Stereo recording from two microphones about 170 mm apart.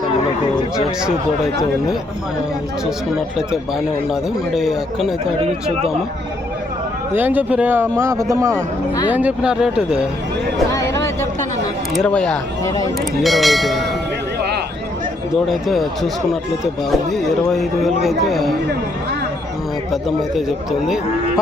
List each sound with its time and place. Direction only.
3.2 s speech: 5° right (ahead or behind)
7.1 s speech: 10° right (ahead or behind)
10.7 s a sound: 15° left (ahead or behind)
11.9 s speech: 5° left (ahead or behind)
12.6 s speech: 20° left (ahead or behind)
13.2 s speech: centre (ahead or behind)
15.4 s speech: centre (ahead or behind)
19.9 s speech: centre (ahead or behind)